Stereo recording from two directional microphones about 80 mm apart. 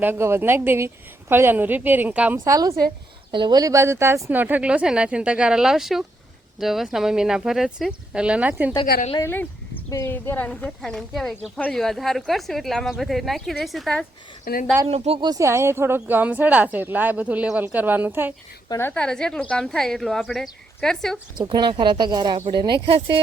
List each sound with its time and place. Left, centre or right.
0.0 s speech: right
2.4 s a woman's voice: right
3.3 s speech: right
3.6 s speech: right
4.3 s speech: right
8.7 s a woman's voice: left
9.2 s a woman's voice: left
10.8 s speech: centre
15.4 s speech: right
16.0 s speech: right
18.9 s speech: centre
21.3 s speech: right